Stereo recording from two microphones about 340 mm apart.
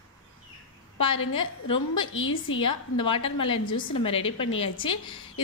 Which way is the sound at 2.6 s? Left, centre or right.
Centre.